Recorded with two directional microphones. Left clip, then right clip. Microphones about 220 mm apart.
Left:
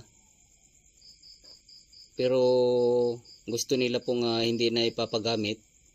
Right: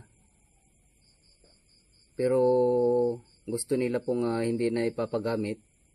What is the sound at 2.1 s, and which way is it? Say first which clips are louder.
Speech: even; 15° left (ahead or behind).